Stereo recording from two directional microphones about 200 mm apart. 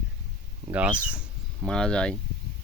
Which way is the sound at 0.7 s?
5° right (ahead or behind).